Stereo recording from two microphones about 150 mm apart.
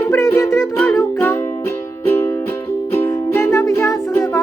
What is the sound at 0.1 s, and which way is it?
Music, 20° left (ahead or behind).